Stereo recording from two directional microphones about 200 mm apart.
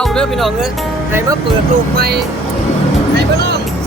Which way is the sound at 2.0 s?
55° right (ahead or behind).